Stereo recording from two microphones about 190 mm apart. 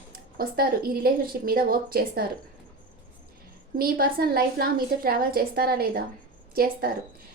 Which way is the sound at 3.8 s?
50° right (ahead or behind).